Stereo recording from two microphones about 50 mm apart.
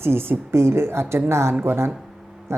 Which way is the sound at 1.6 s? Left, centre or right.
Right.